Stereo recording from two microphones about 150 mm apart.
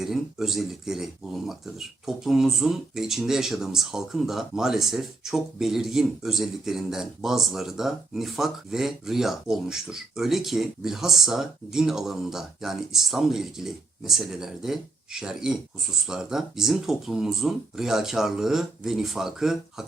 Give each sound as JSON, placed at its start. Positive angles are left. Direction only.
{"t": 0.0, "sound": "speech", "side_deg": 0}